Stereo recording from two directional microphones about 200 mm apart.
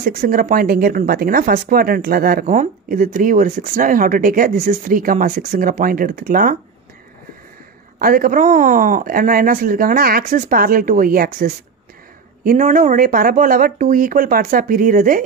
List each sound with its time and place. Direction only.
0.0 s speech: 45° right (ahead or behind)
8.0 s speech: 45° right (ahead or behind)